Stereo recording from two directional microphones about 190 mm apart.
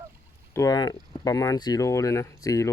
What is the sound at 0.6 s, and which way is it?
Speech, 20° left (ahead or behind).